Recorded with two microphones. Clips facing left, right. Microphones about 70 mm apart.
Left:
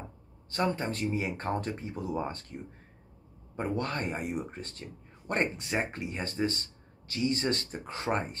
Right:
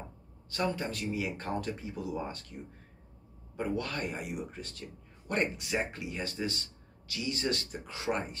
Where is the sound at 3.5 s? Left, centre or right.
Left.